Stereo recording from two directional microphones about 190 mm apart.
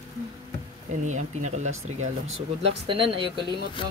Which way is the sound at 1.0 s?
40° right (ahead or behind).